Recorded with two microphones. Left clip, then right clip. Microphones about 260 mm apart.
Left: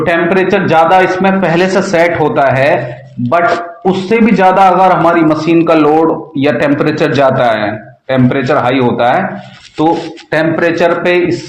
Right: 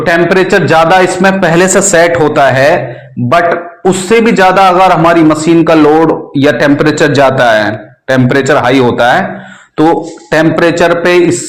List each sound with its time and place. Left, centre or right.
0.0 s a man's voice: right